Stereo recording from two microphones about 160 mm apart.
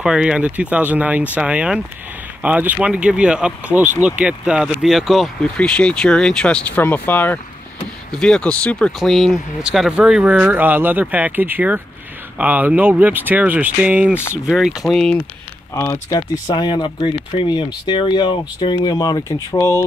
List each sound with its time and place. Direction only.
0.0 s speech: 5° right (ahead or behind)
15.7 s speech: 20° left (ahead or behind)